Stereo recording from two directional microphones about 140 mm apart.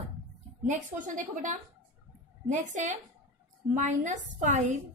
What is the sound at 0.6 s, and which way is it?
A woman's voice, 65° right (ahead or behind).